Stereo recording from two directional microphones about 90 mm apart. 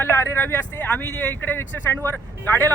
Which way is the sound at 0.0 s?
25° left (ahead or behind).